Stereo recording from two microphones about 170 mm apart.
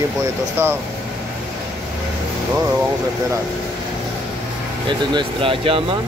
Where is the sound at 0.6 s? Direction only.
15° right (ahead or behind).